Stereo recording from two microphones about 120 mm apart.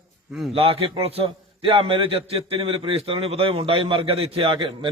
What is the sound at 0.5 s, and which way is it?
A man's voice, 50° right (ahead or behind).